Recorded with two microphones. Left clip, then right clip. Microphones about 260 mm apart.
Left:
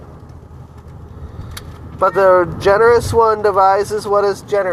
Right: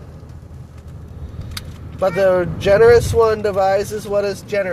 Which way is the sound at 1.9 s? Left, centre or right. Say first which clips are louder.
Left 4 dB; centre.